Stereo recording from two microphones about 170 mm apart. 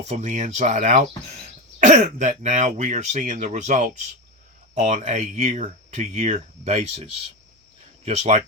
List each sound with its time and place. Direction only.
0.0 s speech: 40° right (ahead or behind)